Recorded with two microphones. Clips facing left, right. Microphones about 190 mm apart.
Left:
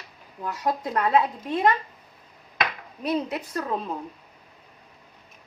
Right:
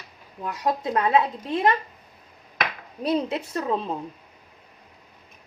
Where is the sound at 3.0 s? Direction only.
25° right (ahead or behind).